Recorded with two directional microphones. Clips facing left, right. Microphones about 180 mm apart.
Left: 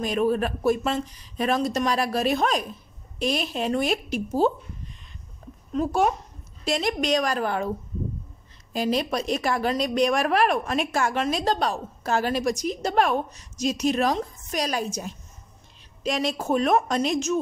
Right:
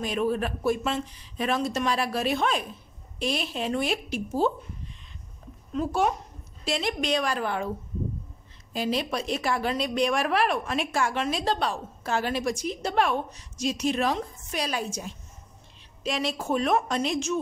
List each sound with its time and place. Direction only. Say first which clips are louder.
0.0 s a woman's voice: left 3 dB; 45° left (ahead or behind)
5.8 s a woman's voice: left 3 dB; 45° left (ahead or behind)
8.7 s a woman's voice: left 3 dB; 45° left (ahead or behind)